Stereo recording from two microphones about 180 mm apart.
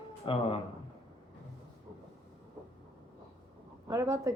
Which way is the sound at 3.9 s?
15° right (ahead or behind).